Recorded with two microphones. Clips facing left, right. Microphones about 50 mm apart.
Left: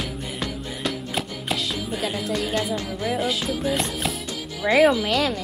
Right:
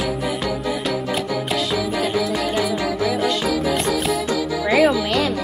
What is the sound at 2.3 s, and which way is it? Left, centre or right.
Music, centre.